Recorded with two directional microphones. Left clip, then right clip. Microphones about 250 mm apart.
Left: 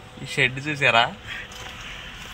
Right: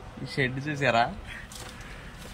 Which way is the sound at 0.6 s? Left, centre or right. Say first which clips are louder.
Left 5 dB; centre.